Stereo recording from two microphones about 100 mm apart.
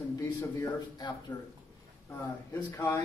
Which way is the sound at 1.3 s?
45° left (ahead or behind).